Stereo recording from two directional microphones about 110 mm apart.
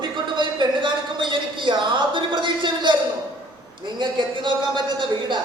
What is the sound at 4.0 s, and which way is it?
Speech, 45° right (ahead or behind).